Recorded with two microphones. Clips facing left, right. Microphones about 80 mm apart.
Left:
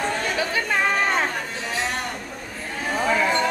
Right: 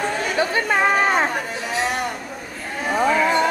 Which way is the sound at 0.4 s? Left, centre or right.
Right.